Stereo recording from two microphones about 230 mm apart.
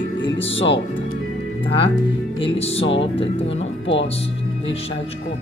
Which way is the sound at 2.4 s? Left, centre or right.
Left.